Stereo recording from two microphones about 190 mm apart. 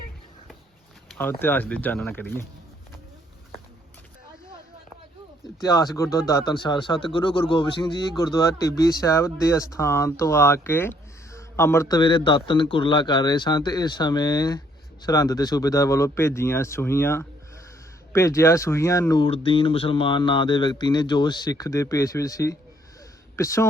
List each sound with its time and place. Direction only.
1.1 s speech: 10° left (ahead or behind)
5.5 s speech: 20° left (ahead or behind)